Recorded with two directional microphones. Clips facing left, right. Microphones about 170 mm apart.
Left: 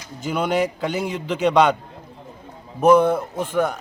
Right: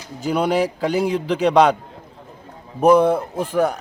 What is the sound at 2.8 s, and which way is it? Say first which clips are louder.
Speech: right 1 dB; 35° right (ahead or behind).